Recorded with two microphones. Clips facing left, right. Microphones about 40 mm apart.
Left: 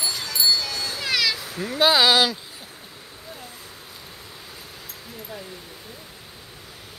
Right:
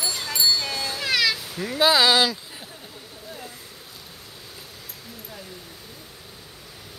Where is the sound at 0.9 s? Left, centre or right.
Centre.